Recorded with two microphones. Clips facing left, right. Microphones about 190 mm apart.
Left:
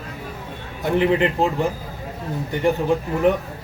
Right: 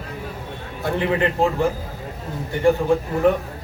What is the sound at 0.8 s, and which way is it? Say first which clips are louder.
Speech: left 3 dB; 20° left (ahead or behind).